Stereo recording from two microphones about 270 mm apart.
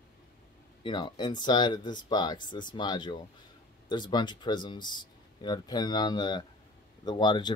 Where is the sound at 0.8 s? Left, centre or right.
Centre.